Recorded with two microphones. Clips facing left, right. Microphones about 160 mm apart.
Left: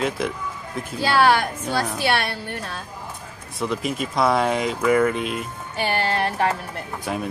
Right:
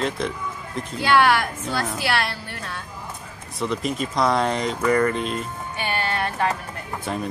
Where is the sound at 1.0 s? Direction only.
35° left (ahead or behind).